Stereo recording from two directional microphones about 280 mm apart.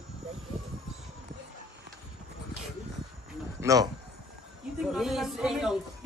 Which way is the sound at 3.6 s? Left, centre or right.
Centre.